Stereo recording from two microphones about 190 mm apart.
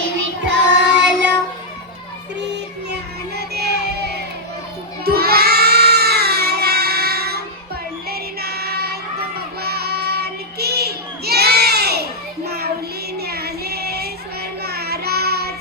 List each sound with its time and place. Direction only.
0.4 s child singing: 65° right (ahead or behind)
2.9 s music: 60° right (ahead or behind)
5.0 s a sound: 55° right (ahead or behind)
8.1 s child singing: 55° right (ahead or behind)